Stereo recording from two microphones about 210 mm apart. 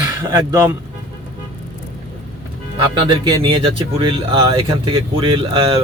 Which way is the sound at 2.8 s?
25° right (ahead or behind).